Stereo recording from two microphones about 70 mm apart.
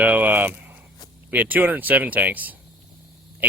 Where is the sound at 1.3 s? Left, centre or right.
Right.